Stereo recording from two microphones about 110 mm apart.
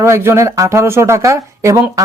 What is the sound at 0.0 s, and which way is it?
Speech, 25° right (ahead or behind).